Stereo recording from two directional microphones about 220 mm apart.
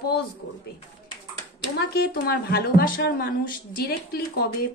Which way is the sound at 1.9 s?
45° left (ahead or behind).